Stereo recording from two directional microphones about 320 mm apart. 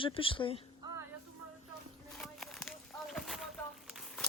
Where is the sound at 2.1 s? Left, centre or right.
Centre.